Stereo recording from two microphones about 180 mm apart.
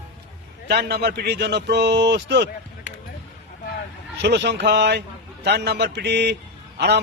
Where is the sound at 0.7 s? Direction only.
65° right (ahead or behind).